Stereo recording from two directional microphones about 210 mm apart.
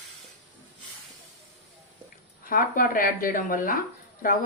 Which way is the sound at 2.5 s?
45° left (ahead or behind).